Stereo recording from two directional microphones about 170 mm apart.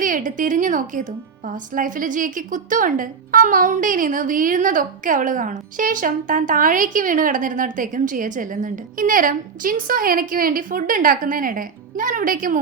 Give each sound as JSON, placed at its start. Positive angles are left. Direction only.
{"t": 0.0, "sound": "a woman's voice", "side_deg": -50}